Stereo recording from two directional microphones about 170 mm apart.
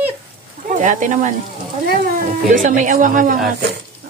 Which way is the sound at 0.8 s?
45° right (ahead or behind).